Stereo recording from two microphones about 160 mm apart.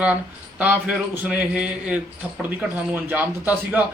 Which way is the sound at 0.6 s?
10° right (ahead or behind).